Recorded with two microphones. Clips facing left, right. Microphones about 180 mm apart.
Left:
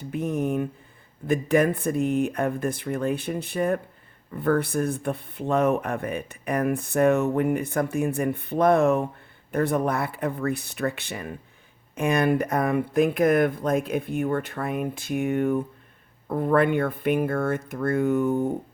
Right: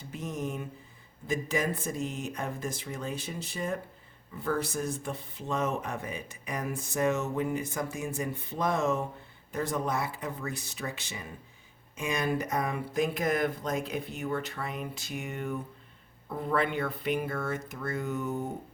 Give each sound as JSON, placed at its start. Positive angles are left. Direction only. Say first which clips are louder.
{"t": 0.0, "sound": "speech", "louder": "left 9 dB", "side_deg": 60}